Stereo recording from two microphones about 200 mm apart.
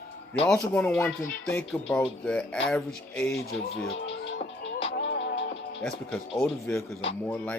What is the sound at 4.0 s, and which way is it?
Music, 70° left (ahead or behind).